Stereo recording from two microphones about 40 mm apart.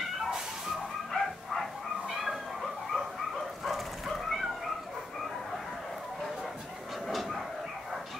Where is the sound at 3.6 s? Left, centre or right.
Centre.